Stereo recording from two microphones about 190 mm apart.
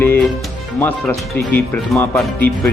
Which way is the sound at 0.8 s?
10° left (ahead or behind).